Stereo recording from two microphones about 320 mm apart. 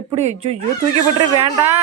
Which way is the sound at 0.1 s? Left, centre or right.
Centre.